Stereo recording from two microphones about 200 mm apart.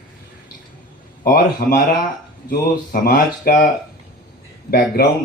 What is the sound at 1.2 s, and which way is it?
Speech, 45° left (ahead or behind).